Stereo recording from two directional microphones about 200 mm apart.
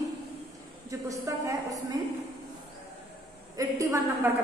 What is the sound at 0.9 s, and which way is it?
Speech, 15° right (ahead or behind).